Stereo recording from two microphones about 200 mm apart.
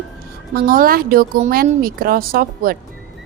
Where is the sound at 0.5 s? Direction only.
45° right (ahead or behind).